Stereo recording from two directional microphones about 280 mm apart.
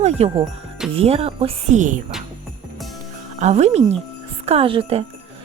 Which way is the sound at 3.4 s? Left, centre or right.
Right.